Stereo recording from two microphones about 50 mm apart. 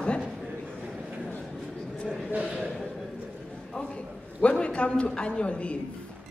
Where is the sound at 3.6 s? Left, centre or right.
Centre.